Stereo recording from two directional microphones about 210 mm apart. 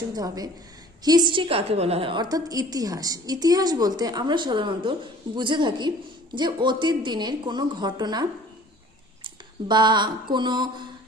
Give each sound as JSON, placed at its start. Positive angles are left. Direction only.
{"t": 0.1, "sound": "a woman's voice", "side_deg": -15}
{"t": 9.2, "sound": "a sound", "side_deg": -20}
{"t": 10.3, "sound": "a woman's voice", "side_deg": -20}